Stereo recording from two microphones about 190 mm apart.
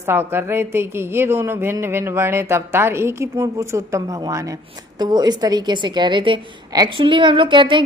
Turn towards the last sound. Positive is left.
turn(degrees=-25)  # may be behind; listen again after turning